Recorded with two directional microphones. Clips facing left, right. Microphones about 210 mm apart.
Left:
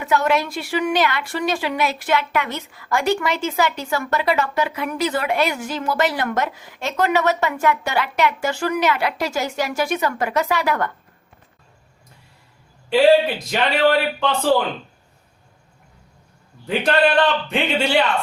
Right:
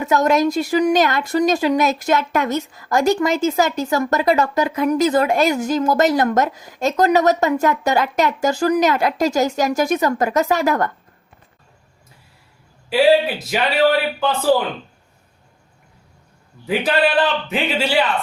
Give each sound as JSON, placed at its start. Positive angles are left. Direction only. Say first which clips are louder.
{"t": 0.0, "sound": "speech", "louder": "right 4 dB", "side_deg": -40}
{"t": 12.9, "sound": "a man's voice", "louder": "even", "side_deg": -5}
{"t": 16.6, "sound": "a man's voice", "louder": "even", "side_deg": -5}